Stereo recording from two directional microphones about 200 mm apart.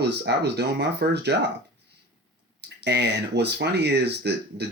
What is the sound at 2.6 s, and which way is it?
Speech, 55° right (ahead or behind).